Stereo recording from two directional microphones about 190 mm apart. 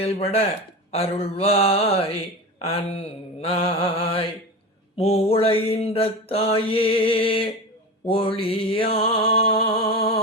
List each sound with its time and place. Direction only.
0.0 s mantra: 30° left (ahead or behind)